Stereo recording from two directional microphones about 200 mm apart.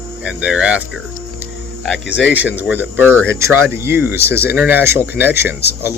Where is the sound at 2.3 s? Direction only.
10° right (ahead or behind).